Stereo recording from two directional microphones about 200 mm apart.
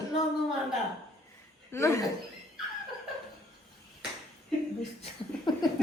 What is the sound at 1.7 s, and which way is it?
Speech, 15° left (ahead or behind).